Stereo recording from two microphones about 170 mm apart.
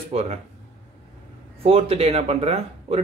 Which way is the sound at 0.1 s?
40° right (ahead or behind).